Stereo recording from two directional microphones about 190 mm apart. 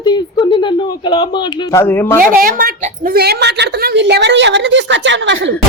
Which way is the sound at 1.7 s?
10° left (ahead or behind).